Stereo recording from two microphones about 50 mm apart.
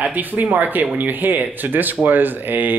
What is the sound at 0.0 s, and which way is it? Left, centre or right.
Speech, right.